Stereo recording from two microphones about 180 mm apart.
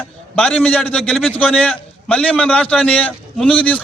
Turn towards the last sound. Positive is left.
turn(degrees=5)  # may be behind; listen again after turning